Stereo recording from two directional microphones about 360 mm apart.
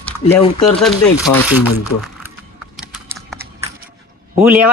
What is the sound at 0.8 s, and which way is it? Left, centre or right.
Speech, centre.